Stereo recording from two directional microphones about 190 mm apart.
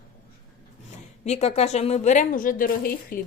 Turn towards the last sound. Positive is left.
turn(degrees=50)  # may be behind; listen again after turning